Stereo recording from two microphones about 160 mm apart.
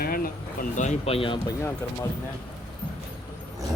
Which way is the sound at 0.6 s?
50° left (ahead or behind).